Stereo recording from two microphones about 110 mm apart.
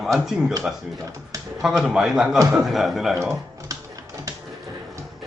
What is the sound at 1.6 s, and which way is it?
A man's voice, 5° right (ahead or behind).